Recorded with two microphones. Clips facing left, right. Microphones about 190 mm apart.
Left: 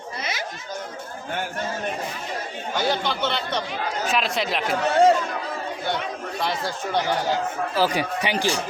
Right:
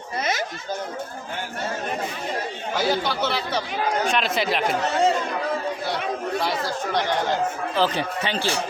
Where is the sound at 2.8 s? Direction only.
5° right (ahead or behind).